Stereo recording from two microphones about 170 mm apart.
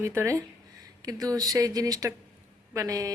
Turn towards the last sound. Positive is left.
turn(degrees=-20)  # may be behind; listen again after turning